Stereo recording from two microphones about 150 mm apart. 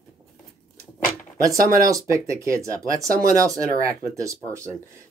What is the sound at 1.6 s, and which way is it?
Speech, 70° right (ahead or behind).